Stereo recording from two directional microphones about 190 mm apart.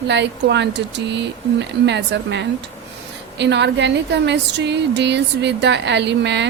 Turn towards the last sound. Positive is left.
turn(degrees=-65)  # may be behind; listen again after turning